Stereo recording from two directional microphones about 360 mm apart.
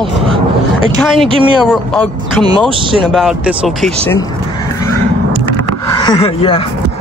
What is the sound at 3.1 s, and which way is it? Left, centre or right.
Speech, centre.